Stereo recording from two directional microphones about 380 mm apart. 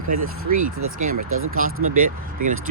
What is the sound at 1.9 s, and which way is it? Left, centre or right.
Speech, right.